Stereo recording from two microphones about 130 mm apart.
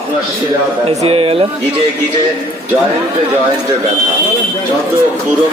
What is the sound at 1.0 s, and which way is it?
Speech, 45° right (ahead or behind).